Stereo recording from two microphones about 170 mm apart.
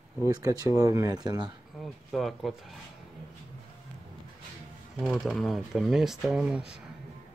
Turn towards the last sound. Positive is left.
turn(degrees=-5)  # may be behind; listen again after turning